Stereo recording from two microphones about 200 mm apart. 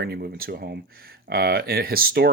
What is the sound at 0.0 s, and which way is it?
Speech, 50° right (ahead or behind).